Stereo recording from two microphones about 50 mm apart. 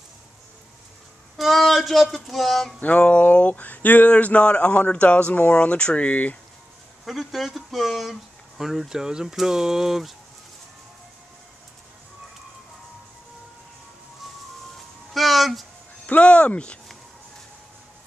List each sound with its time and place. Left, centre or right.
1.3 s speech: centre
2.8 s speech: left
7.1 s speech: centre
15.1 s music: centre
16.1 s speech: left